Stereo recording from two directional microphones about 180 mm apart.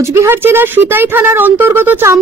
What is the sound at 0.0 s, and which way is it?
A woman's voice, 15° right (ahead or behind).